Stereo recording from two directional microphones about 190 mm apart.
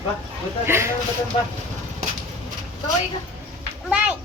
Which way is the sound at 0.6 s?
10° right (ahead or behind).